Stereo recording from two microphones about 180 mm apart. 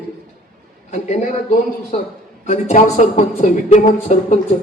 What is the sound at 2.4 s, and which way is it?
Speech, 40° left (ahead or behind).